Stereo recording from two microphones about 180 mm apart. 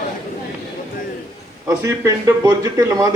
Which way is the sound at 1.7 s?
15° right (ahead or behind).